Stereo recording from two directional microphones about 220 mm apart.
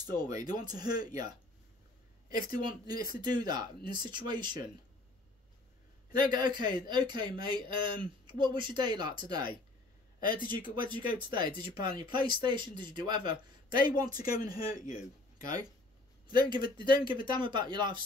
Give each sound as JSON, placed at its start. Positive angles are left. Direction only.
{"t": 0.0, "sound": "a man's voice", "side_deg": -20}
{"t": 6.1, "sound": "a man's voice", "side_deg": -20}
{"t": 10.7, "sound": "a man's voice", "side_deg": -20}
{"t": 16.3, "sound": "a man's voice", "side_deg": -20}